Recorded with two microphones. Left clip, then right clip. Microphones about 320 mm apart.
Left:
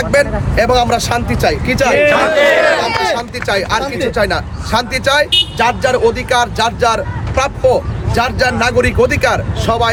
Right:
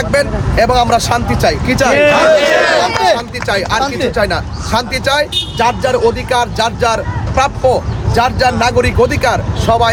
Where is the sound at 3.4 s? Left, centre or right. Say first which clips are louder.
Even; centre.